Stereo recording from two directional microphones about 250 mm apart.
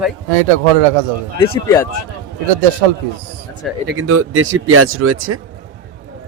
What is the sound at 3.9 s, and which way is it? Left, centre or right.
Speech, right.